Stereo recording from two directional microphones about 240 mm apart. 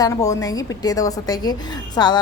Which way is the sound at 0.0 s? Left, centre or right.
Centre.